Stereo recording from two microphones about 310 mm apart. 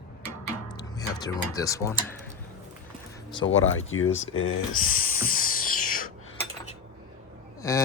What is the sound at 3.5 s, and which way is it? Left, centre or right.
Speech, left.